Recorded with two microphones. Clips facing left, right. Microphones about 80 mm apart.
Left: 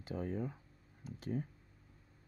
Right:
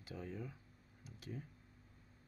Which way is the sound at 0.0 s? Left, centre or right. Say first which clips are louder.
Left 8 dB; left.